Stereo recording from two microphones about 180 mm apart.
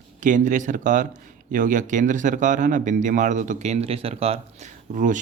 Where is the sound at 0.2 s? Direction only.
45° right (ahead or behind).